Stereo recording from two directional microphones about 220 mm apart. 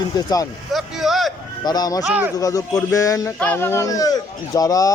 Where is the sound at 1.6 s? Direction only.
15° left (ahead or behind).